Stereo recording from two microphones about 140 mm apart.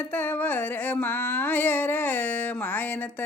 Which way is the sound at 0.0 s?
15° left (ahead or behind).